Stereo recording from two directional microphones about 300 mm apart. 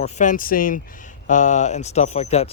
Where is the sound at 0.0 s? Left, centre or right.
Left.